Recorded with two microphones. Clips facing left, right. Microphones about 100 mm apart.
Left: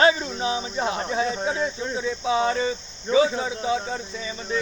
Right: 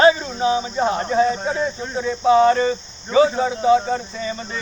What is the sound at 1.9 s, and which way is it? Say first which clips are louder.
Speech: right 11 dB; 50° right (ahead or behind).